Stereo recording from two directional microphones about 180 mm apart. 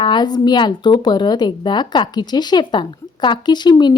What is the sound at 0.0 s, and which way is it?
Speech, 25° left (ahead or behind).